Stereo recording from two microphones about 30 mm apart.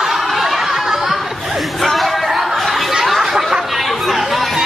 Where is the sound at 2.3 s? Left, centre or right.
Centre.